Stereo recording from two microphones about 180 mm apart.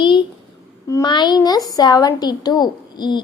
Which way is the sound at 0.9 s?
20° left (ahead or behind).